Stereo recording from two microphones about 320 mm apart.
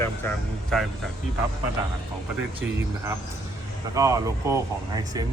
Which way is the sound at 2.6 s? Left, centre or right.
Centre.